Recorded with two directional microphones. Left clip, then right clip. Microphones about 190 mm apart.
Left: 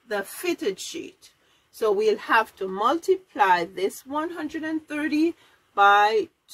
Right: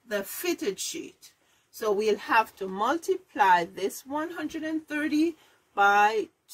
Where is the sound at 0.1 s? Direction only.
10° right (ahead or behind).